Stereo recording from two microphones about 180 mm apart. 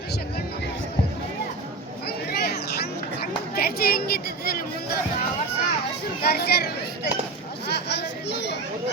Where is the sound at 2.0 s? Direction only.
60° left (ahead or behind).